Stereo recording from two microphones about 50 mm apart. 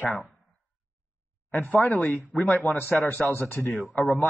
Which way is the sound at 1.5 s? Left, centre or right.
Left.